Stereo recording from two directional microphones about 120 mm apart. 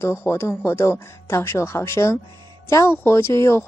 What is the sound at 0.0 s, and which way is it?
Speech, 25° left (ahead or behind).